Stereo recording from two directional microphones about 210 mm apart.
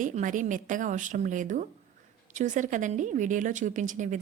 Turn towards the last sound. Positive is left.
turn(degrees=-35)  # may be behind; listen again after turning